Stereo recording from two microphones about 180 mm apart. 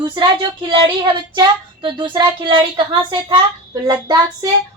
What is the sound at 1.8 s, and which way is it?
A woman's voice, 25° right (ahead or behind).